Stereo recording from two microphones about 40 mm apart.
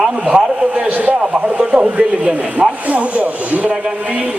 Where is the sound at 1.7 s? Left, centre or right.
Right.